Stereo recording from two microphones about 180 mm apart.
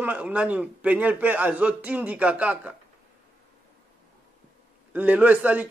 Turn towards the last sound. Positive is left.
turn(degrees=-10)  # may be behind; listen again after turning